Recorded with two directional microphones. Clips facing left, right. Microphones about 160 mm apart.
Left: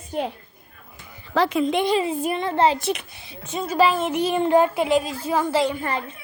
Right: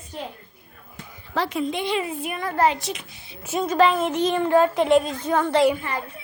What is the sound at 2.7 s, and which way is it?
Speech, 55° left (ahead or behind).